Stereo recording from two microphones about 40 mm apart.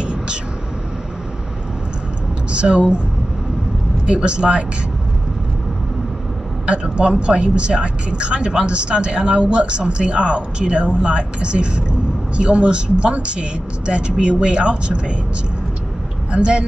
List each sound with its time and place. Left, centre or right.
0.0 s vehicle: right
2.5 s speech: right
4.0 s speech: right
6.6 s speech: right
16.3 s speech: right